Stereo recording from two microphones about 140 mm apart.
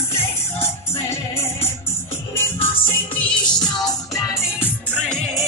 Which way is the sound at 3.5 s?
30° left (ahead or behind).